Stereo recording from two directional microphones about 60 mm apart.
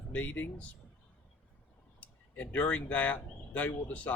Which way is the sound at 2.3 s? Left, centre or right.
Left.